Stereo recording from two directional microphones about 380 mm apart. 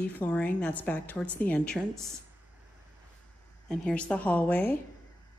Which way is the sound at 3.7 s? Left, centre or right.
Centre.